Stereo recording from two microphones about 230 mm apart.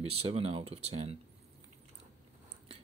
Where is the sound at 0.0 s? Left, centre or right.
Right.